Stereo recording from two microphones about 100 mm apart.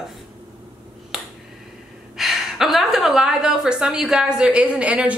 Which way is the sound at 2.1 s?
Centre (ahead or behind).